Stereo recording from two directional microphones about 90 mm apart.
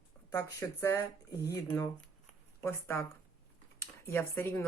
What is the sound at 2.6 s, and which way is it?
Speech, 25° left (ahead or behind).